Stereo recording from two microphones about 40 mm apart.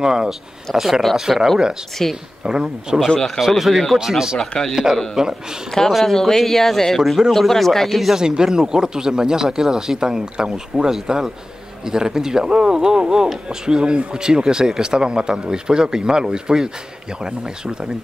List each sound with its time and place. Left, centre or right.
0.0 s speech: centre
2.0 s speech: centre
2.4 s speech: centre
3.5 s speech: centre
4.4 s speech: centre
5.2 s speech: centre
5.8 s speech: centre
7.0 s speech: centre
8.2 s speech: centre